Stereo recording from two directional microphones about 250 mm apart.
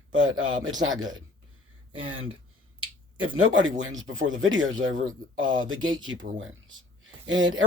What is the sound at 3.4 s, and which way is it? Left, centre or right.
Speech, right.